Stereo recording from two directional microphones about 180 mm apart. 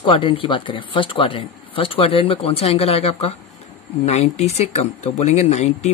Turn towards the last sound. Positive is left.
turn(degrees=40)  # may be behind; listen again after turning